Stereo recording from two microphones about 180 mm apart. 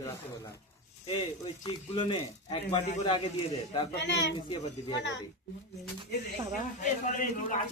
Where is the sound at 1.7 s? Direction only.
25° left (ahead or behind).